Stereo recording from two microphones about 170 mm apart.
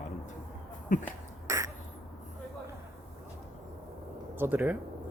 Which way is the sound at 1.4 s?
20° right (ahead or behind).